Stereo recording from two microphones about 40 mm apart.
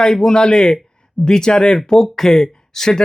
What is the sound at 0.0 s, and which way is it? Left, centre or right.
Speech, centre.